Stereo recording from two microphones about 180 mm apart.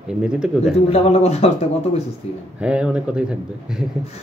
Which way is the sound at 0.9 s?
35° left (ahead or behind).